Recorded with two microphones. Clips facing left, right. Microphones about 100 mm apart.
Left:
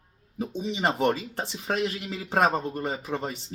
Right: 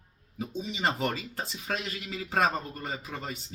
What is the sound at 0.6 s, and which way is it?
Speech, 20° left (ahead or behind).